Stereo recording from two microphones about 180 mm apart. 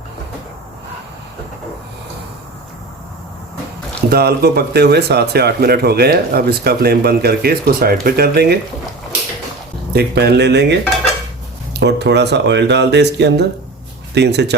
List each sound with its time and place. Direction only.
4.1 s speech: 60° right (ahead or behind)
9.9 s speech: 65° right (ahead or behind)
11.8 s speech: 70° right (ahead or behind)